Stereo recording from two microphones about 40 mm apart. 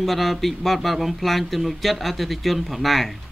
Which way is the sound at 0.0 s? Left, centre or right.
Centre.